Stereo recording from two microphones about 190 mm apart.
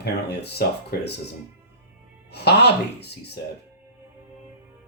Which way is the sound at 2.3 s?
60° left (ahead or behind).